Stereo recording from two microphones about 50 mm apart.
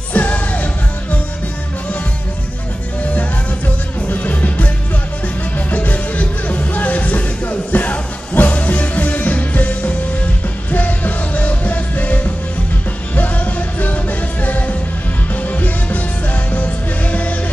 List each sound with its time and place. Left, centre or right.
0.1 s music: left
3.0 s music: left
5.7 s music: left